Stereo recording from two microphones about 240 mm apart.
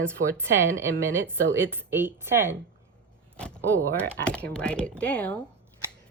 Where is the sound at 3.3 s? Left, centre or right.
Centre.